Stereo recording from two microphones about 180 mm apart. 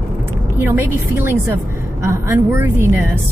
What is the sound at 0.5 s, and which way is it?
Speech, 10° right (ahead or behind).